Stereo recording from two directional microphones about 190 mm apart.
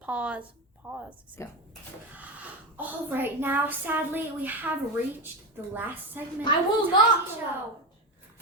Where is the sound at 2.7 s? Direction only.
10° right (ahead or behind).